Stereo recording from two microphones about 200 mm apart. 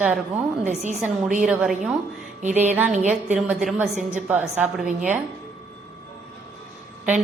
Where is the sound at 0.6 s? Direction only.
35° right (ahead or behind).